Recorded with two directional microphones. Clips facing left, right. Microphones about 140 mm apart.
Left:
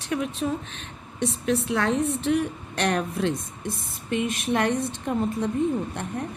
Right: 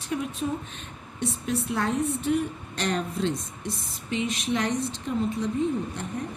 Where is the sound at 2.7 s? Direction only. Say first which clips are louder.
Left 3 dB; 60° left (ahead or behind).